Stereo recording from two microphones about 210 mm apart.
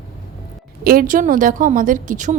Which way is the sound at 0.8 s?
45° right (ahead or behind).